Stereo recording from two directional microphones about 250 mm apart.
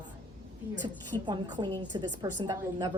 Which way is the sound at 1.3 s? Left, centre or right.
Centre.